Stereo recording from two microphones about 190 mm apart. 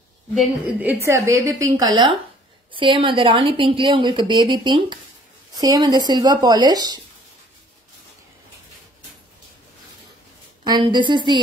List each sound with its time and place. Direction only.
0.3 s a woman's voice: 5° right (ahead or behind); by 7.0 s 20° right (ahead or behind)
10.6 s a woman's voice: 25° right (ahead or behind)